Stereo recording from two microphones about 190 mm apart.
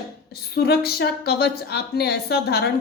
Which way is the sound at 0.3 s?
55° left (ahead or behind).